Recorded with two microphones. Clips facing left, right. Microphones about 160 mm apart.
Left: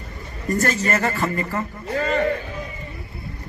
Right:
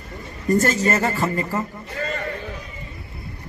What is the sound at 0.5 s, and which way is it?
A man's voice, 25° right (ahead or behind).